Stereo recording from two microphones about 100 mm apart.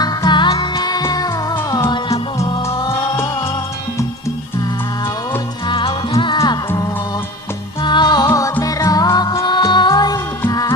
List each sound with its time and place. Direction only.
0.3 s music: 50° left (ahead or behind)
0.8 s music: 40° left (ahead or behind)
2.6 s music: 30° left (ahead or behind)
5.6 s music: 55° left (ahead or behind)
7.8 s music: 50° left (ahead or behind)
8.3 s music: 35° left (ahead or behind)